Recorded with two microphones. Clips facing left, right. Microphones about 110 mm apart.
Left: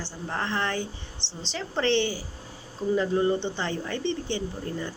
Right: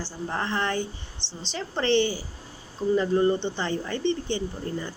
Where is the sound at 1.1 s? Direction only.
30° left (ahead or behind).